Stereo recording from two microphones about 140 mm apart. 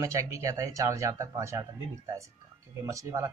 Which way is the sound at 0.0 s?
20° right (ahead or behind).